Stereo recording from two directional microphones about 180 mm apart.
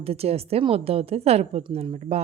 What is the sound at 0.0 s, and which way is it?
A woman's voice, 35° right (ahead or behind).